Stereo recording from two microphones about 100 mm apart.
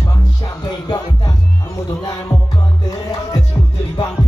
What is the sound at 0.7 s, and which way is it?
Music, 45° left (ahead or behind).